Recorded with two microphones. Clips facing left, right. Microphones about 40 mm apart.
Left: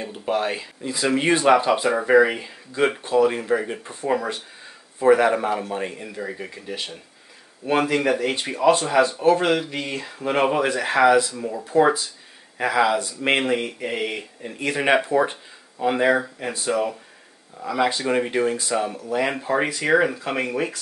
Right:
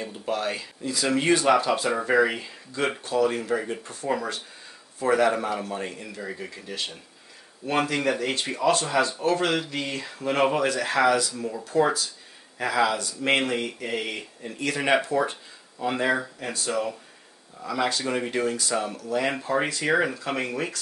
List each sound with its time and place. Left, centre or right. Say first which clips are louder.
0.0 s speech: left 4 dB; left